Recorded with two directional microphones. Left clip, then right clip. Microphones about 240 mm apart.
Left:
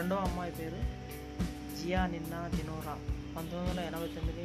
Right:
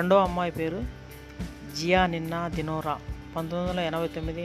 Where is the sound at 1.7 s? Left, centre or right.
Right.